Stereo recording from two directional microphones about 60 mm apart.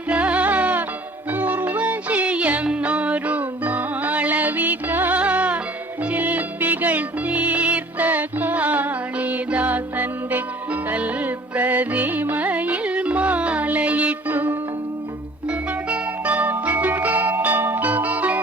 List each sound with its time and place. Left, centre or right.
0.1 s music: right